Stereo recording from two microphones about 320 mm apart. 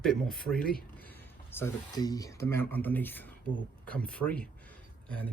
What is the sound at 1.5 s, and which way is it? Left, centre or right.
Speech, centre.